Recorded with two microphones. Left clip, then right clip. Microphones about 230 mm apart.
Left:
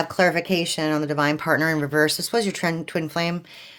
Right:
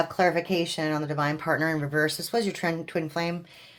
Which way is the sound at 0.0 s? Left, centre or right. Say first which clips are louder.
Left 3 dB; left.